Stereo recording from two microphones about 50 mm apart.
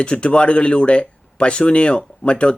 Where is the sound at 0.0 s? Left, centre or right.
Left.